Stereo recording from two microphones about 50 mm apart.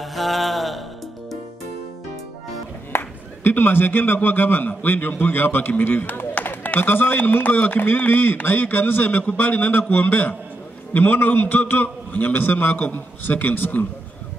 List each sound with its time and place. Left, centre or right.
0.0 s mantra: centre
2.9 s a man's voice: left